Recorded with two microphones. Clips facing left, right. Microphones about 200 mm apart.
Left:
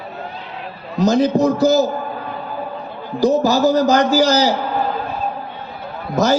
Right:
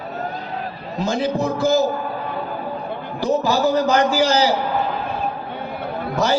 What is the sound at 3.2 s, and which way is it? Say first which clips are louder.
A man's voice: left 4 dB; 40° left (ahead or behind).